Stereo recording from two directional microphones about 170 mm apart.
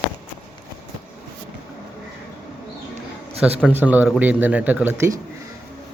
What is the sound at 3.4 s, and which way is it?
Speech, 10° right (ahead or behind).